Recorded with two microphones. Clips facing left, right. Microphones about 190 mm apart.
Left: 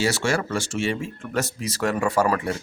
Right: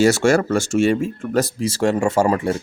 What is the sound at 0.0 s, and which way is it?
Speech, 45° right (ahead or behind).